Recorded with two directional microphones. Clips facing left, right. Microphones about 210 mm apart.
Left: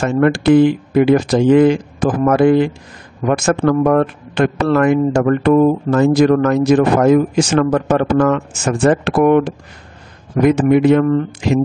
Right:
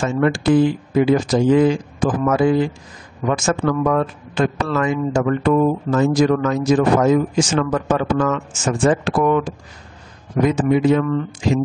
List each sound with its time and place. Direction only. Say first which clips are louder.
0.0 s speech: left 4 dB; 65° left (ahead or behind)